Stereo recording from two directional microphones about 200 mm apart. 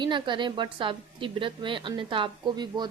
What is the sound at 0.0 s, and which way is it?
Speech, 25° right (ahead or behind).